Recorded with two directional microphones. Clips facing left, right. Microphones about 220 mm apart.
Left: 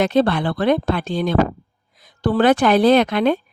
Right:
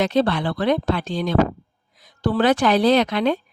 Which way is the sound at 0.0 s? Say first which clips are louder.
Left 3 dB; 55° left (ahead or behind).